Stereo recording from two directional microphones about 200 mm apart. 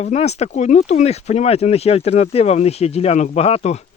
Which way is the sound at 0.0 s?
35° left (ahead or behind).